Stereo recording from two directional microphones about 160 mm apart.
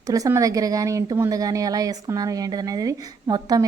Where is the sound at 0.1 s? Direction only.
20° right (ahead or behind).